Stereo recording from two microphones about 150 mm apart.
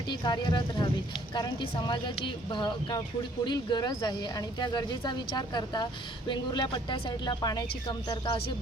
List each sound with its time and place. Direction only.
0.1 s speech: 30° left (ahead or behind)